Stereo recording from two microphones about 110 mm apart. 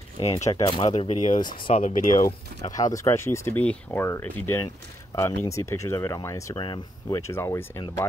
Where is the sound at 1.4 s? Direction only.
50° left (ahead or behind).